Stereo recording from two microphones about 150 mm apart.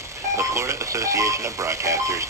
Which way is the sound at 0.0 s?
20° right (ahead or behind).